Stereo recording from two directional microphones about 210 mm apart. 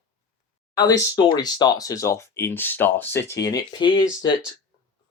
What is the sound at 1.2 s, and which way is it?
Speech, 20° left (ahead or behind).